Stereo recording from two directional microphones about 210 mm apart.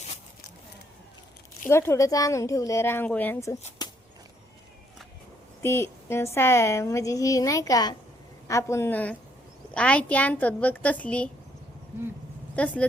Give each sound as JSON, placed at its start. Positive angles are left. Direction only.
{"t": 1.7, "sound": "a woman's voice", "side_deg": 15}
{"t": 3.8, "sound": "a sound", "side_deg": 20}
{"t": 5.6, "sound": "a woman's voice", "side_deg": 10}
{"t": 12.5, "sound": "speech", "side_deg": 5}